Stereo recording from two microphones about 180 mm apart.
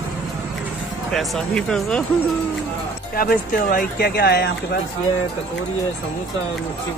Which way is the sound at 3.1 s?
50° left (ahead or behind).